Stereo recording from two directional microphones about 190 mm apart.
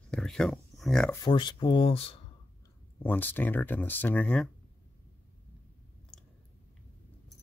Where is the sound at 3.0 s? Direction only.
10° left (ahead or behind).